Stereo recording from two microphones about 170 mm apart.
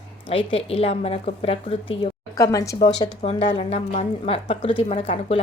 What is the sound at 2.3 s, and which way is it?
Speech, 20° left (ahead or behind).